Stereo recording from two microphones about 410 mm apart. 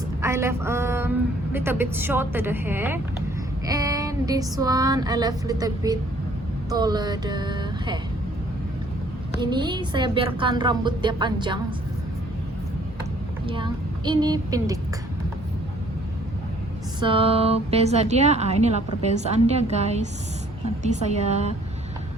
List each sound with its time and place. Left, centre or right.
0.2 s a woman's voice: centre
6.7 s music: centre
9.4 s a woman's voice: centre
13.5 s a woman's voice: centre
17.0 s a woman's voice: centre